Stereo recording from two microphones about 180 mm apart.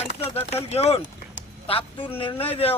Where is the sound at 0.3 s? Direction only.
35° left (ahead or behind).